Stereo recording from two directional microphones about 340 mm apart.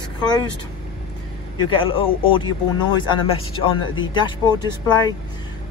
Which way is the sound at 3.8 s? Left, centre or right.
Left.